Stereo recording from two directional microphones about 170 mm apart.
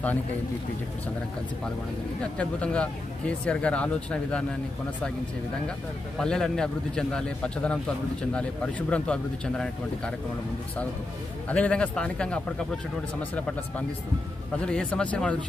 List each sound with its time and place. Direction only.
2.3 s speech: 5° left (ahead or behind)
6.1 s a man's voice: 5° left (ahead or behind)
11.4 s speech: 5° left (ahead or behind)